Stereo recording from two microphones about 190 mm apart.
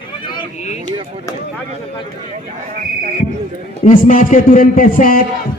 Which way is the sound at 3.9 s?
45° left (ahead or behind).